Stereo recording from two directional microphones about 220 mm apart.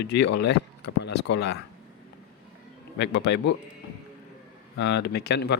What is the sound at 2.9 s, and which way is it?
Speech, 50° left (ahead or behind).